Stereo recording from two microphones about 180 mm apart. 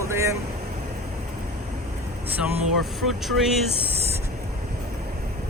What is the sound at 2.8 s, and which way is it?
Speech, centre (ahead or behind).